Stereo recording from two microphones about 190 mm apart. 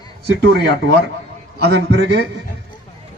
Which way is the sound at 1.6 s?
65° right (ahead or behind).